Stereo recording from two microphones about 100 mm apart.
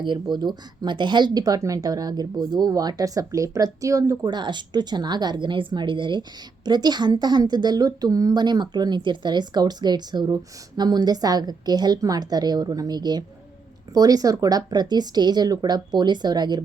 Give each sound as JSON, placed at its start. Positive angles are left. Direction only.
{"t": 0.0, "sound": "a woman's voice", "side_deg": -50}